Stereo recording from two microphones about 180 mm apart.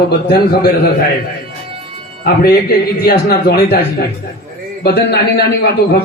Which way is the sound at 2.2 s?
60° left (ahead or behind).